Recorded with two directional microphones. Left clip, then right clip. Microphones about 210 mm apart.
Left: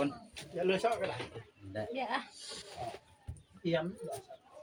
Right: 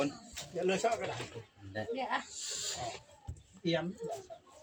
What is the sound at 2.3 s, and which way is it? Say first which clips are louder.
Speech: right 7 dB; 20° right (ahead or behind).